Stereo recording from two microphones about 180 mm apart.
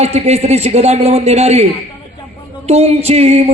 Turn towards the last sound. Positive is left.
turn(degrees=-35)  # may be behind; listen again after turning